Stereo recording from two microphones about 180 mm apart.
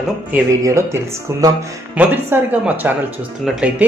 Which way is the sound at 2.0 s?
10° right (ahead or behind).